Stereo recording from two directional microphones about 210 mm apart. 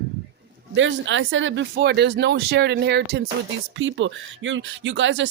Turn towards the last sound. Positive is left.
turn(degrees=-60)  # may be behind; listen again after turning